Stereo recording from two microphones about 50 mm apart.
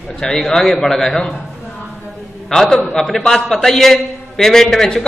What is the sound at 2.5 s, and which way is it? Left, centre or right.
A man's voice, centre.